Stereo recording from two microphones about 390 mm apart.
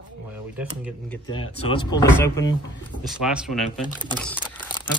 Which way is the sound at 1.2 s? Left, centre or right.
Centre.